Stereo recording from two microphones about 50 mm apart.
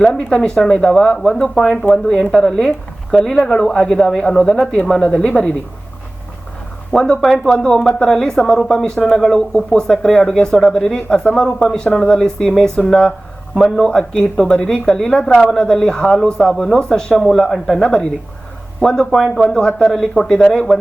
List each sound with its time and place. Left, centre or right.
0.0 s speech: centre
6.9 s speech: centre
7.2 s speech: centre
7.4 s speech: centre